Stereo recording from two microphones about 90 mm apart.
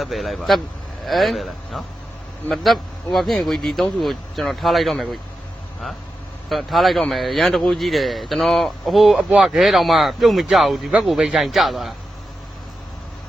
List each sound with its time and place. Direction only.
0.0 s a man's voice: centre (ahead or behind)
6.5 s a man's voice: centre (ahead or behind)